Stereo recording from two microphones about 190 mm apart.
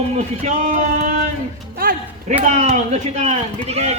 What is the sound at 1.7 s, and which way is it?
Music, 50° right (ahead or behind).